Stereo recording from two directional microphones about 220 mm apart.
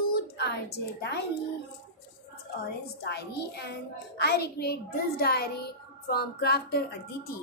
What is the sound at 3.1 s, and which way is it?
A child's voice, 50° left (ahead or behind).